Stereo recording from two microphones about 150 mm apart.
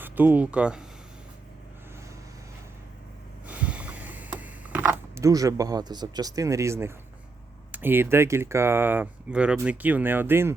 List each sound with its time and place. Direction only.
0.0 s speech: 10° right (ahead or behind)
3.4 s a sound: 10° right (ahead or behind)
7.7 s speech: 15° right (ahead or behind)